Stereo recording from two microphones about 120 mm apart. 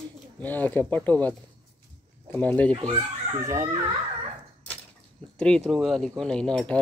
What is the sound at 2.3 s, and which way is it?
Speech, 10° left (ahead or behind).